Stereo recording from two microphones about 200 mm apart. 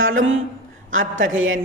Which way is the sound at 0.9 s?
75° right (ahead or behind).